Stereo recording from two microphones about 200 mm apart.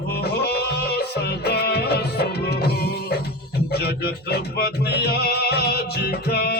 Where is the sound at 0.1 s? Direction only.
55° left (ahead or behind).